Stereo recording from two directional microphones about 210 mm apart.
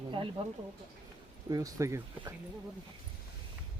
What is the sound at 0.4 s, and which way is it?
Speech, 25° right (ahead or behind).